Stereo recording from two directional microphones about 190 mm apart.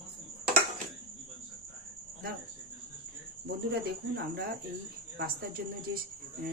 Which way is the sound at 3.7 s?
55° right (ahead or behind).